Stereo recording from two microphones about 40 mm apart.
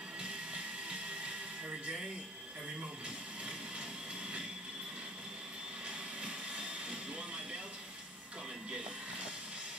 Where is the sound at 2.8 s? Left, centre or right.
Right.